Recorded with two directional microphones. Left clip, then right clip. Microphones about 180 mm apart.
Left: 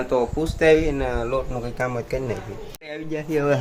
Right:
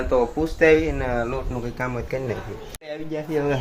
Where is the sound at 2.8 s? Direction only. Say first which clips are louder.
Even; centre (ahead or behind).